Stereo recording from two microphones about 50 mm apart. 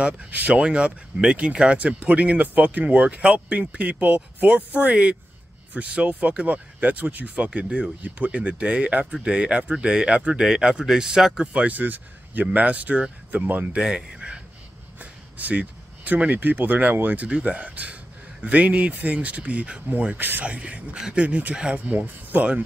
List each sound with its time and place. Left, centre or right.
0.0 s speech: right
10.4 s speech: centre
11.6 s speech: right
13.7 s speech: centre
15.0 s a sound: right
17.0 s speech: right
20.2 s speech: right
20.4 s speech: right